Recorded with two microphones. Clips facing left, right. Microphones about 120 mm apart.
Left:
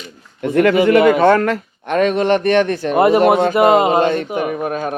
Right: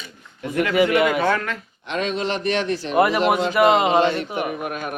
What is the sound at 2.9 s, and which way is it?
Speech, 25° left (ahead or behind).